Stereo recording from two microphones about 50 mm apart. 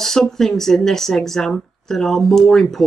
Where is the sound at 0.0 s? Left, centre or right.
Centre.